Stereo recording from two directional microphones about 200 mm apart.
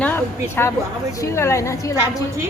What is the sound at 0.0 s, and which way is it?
A woman's voice, 10° left (ahead or behind).